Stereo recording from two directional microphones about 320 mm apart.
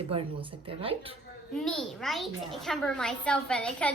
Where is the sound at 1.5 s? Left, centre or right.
Centre.